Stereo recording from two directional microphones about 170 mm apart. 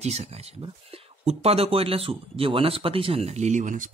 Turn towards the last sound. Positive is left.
turn(degrees=-50)  # may be behind; listen again after turning